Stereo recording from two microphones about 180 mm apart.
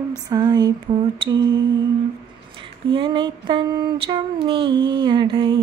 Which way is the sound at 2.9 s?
25° right (ahead or behind).